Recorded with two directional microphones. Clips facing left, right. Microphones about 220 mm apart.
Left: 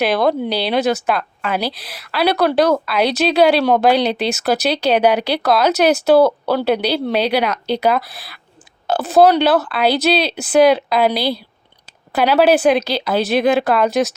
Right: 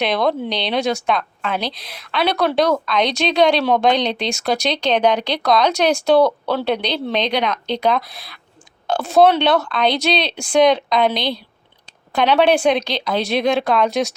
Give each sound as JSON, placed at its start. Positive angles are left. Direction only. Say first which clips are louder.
{"t": 0.0, "sound": "a woman's voice", "louder": "left 3 dB", "side_deg": 5}